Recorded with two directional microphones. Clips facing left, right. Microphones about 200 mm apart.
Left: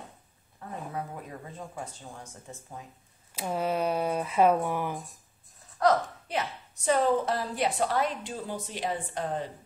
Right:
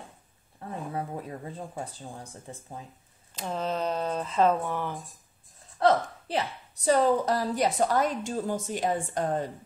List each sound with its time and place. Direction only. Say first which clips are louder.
0.6 s a sound: right 2 dB; 30° right (ahead or behind)
3.3 s speech: left 2 dB; 10° left (ahead or behind)
5.8 s a woman's voice: right 1 dB; 30° right (ahead or behind); by 9.5 s 45° right (ahead or behind)